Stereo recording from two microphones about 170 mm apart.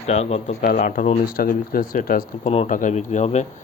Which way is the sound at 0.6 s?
55° left (ahead or behind).